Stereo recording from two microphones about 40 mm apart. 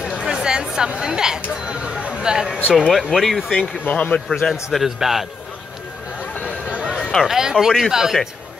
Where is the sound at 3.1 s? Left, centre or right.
Centre.